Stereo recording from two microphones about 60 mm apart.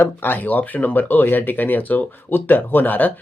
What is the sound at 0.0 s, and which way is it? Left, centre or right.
Speech, left.